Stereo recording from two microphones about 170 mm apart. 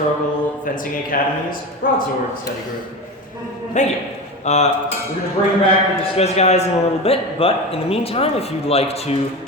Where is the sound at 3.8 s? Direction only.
45° left (ahead or behind).